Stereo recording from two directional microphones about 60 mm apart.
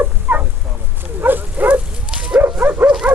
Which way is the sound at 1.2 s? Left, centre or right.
Right.